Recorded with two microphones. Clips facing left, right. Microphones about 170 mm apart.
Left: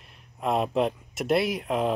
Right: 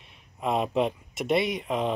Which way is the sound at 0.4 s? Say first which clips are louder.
Left 1 dB; centre (ahead or behind).